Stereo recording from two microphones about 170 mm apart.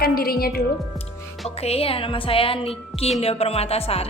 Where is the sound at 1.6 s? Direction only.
35° left (ahead or behind).